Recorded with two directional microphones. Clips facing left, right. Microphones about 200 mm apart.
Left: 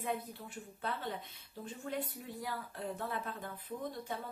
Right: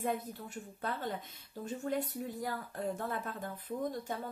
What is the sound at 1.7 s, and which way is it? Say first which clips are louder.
Speech: right 5 dB; 45° right (ahead or behind).